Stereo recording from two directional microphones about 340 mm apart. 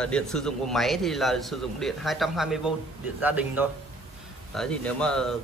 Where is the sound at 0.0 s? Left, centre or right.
Centre.